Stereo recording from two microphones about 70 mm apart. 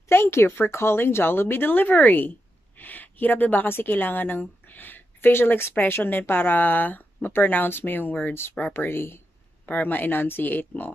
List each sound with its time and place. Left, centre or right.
0.1 s a woman's voice: left